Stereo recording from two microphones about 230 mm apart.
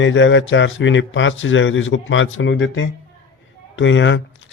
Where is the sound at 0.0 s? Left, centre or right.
Left.